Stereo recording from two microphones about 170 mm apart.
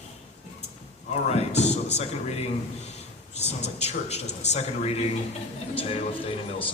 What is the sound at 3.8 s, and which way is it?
A man's voice, 40° left (ahead or behind).